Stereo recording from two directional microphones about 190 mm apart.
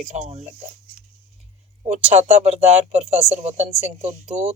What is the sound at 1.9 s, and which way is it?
Speech, 35° right (ahead or behind).